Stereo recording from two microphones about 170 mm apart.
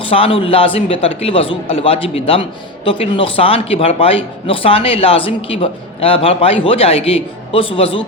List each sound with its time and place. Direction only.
0.0 s a man's voice: 30° left (ahead or behind)